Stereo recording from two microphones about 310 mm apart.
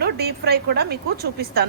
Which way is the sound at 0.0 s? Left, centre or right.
Right.